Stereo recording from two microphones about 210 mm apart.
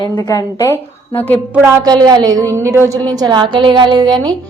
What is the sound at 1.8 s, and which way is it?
A woman's voice, 20° right (ahead or behind).